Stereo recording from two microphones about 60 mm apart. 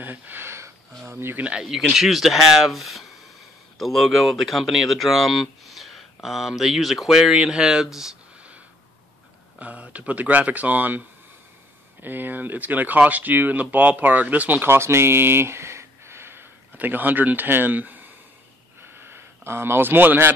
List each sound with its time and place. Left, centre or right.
0.0 s a sound: right
1.1 s speech: right
1.5 s speech: centre
9.6 s speech: right
16.7 s speech: right
18.8 s a sound: right